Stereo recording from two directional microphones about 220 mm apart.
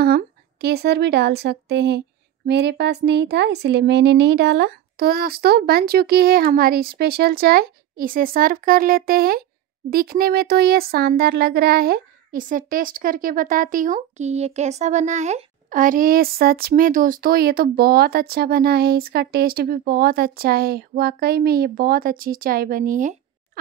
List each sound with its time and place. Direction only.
0.0 s speech: 45° right (ahead or behind)